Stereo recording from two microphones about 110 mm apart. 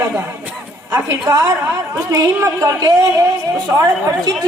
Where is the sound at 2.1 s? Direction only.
30° right (ahead or behind).